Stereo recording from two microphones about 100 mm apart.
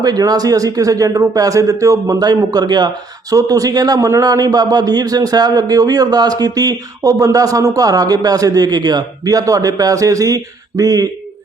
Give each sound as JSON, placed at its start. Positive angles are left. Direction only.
{"t": 0.0, "sound": "a man's voice", "side_deg": -40}